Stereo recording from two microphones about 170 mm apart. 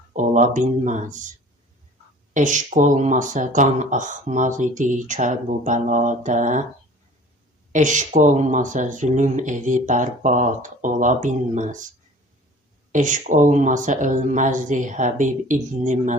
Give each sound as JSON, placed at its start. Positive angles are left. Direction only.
{"t": 0.1, "sound": "speech", "side_deg": -50}
{"t": 2.3, "sound": "speech", "side_deg": -50}
{"t": 7.7, "sound": "speech", "side_deg": -45}
{"t": 12.9, "sound": "speech", "side_deg": -45}